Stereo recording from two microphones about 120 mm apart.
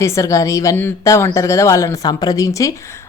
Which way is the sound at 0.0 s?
25° left (ahead or behind).